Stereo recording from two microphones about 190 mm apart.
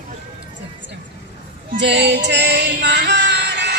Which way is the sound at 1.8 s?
65° right (ahead or behind).